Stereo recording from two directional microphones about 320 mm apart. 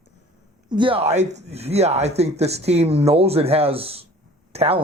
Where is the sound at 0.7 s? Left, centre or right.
Centre.